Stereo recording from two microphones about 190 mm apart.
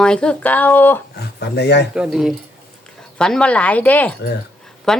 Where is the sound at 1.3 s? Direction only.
60° left (ahead or behind).